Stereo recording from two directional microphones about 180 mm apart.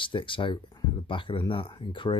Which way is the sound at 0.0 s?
25° left (ahead or behind).